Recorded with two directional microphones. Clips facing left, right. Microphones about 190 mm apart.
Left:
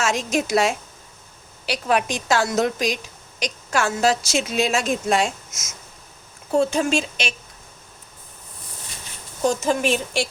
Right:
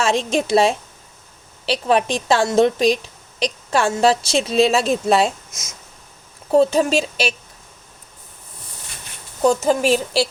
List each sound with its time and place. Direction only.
0.0 s a woman's voice: 30° right (ahead or behind)
6.7 s a woman's voice: 40° right (ahead or behind)
9.6 s a woman's voice: 40° right (ahead or behind)